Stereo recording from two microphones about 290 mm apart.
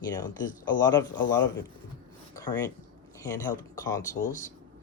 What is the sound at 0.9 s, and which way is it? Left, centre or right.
Speech, centre.